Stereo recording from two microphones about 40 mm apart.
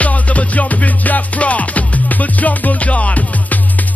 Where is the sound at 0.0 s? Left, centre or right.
Left.